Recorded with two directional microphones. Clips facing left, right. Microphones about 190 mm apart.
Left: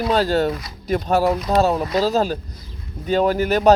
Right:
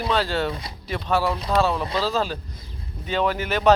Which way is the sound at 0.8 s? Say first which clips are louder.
Left 5 dB; 45° left (ahead or behind).